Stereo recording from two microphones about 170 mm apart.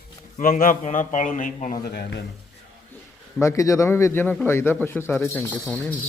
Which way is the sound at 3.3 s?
15° left (ahead or behind).